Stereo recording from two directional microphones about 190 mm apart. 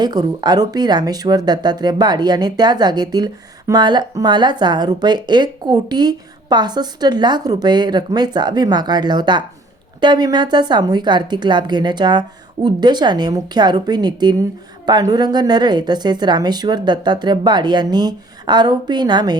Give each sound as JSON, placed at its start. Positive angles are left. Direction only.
{"t": 0.0, "sound": "speech", "side_deg": -20}